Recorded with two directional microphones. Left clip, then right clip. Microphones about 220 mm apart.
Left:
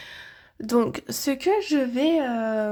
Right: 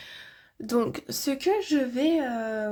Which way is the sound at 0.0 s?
15° left (ahead or behind).